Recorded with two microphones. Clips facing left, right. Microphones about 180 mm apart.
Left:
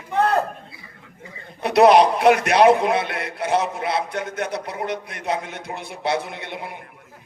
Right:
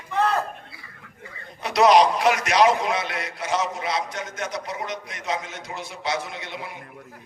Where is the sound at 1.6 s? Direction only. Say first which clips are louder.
Left 3 dB; 60° left (ahead or behind).